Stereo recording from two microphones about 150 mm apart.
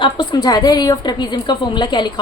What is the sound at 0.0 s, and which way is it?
A woman's voice, 30° left (ahead or behind).